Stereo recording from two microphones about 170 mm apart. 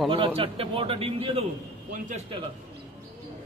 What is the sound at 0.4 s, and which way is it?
Speech, 35° right (ahead or behind).